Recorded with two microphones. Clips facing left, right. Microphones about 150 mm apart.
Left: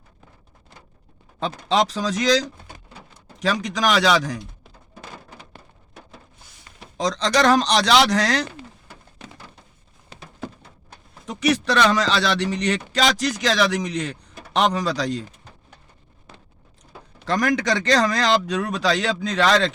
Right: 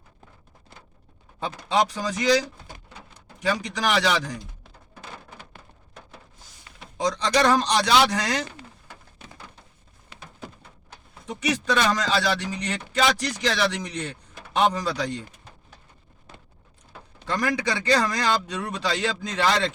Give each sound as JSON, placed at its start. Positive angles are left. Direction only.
{"t": 1.6, "sound": "speech", "side_deg": 85}
{"t": 6.9, "sound": "speech", "side_deg": 90}
{"t": 11.3, "sound": "speech", "side_deg": 80}
{"t": 14.5, "sound": "speech", "side_deg": 75}
{"t": 17.2, "sound": "speech", "side_deg": 80}